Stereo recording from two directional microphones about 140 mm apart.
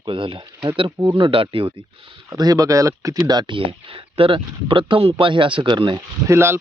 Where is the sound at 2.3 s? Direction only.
25° right (ahead or behind).